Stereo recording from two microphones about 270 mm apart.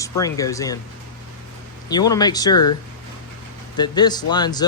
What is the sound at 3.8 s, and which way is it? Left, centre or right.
Speech, centre.